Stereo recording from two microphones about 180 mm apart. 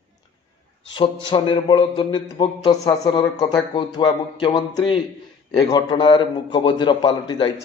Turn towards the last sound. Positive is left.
turn(degrees=25)  # may be behind; listen again after turning